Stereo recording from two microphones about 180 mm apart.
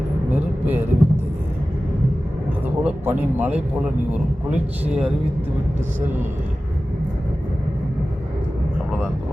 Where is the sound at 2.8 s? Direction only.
10° right (ahead or behind).